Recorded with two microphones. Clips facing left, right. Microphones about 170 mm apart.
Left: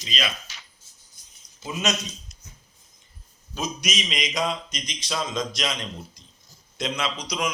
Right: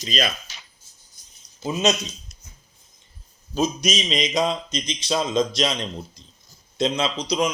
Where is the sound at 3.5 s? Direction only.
30° right (ahead or behind).